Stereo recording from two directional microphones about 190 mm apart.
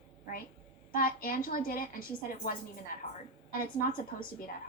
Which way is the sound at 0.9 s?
50° left (ahead or behind).